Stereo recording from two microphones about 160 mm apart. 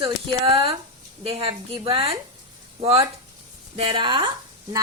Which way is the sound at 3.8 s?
30° right (ahead or behind).